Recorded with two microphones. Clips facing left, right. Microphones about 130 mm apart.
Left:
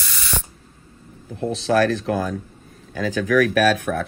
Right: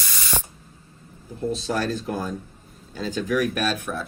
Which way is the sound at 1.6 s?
80° left.